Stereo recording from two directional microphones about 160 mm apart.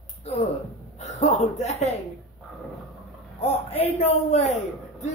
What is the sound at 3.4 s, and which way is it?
A man's voice, 40° left (ahead or behind).